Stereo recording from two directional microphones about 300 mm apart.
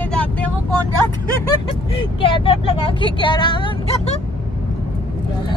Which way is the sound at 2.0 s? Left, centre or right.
Centre.